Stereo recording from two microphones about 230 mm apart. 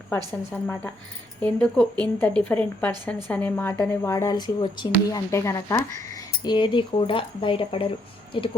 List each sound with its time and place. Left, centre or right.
0.5 s speech: centre